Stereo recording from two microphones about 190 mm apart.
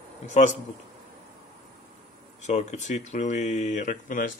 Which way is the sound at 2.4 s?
35° left (ahead or behind).